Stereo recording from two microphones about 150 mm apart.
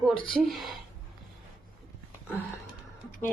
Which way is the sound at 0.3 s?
Centre (ahead or behind).